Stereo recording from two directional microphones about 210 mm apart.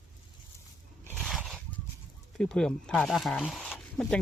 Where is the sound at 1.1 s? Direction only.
Centre (ahead or behind).